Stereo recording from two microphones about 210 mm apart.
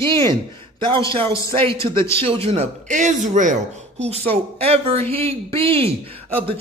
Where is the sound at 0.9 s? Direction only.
25° right (ahead or behind).